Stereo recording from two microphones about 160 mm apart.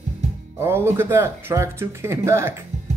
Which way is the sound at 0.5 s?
15° right (ahead or behind).